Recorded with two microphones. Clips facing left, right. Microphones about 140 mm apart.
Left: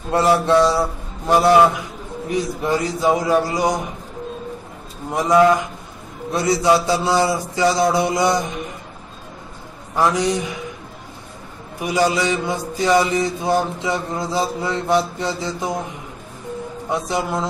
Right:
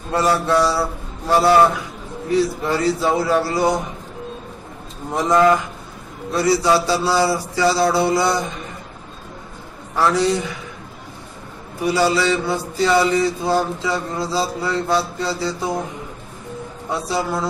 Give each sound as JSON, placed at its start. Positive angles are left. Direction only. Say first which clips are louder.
{"t": 0.1, "sound": "mantra", "louder": "left 2 dB", "side_deg": 20}
{"t": 2.2, "sound": "a man's voice", "louder": "right 3 dB", "side_deg": 15}
{"t": 5.1, "sound": "a man's voice", "louder": "left 1 dB", "side_deg": 10}
{"t": 6.3, "sound": "mantra", "louder": "even", "side_deg": 20}
{"t": 9.9, "sound": "a man's voice", "louder": "right 1 dB", "side_deg": 15}
{"t": 11.8, "sound": "mantra", "louder": "right 1 dB", "side_deg": 15}
{"t": 16.9, "sound": "mantra", "louder": "even", "side_deg": 20}